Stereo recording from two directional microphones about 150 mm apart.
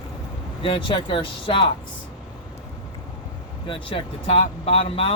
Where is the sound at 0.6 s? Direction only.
35° left (ahead or behind).